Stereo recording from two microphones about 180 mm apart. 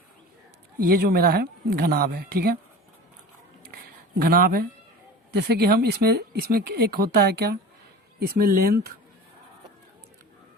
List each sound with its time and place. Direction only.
0.8 s speech: 55° right (ahead or behind)
4.2 s speech: 55° right (ahead or behind)